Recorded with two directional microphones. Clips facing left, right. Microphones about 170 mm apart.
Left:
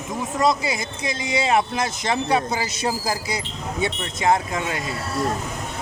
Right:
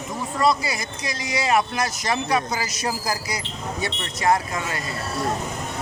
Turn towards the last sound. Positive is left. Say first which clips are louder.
# left 1 dB
turn(degrees=20)  # may be behind; listen again after turning